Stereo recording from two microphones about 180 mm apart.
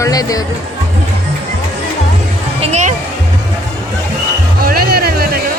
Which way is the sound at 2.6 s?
40° right (ahead or behind).